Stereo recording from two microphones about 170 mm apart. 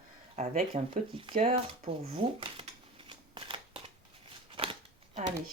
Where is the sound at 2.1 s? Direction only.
30° right (ahead or behind).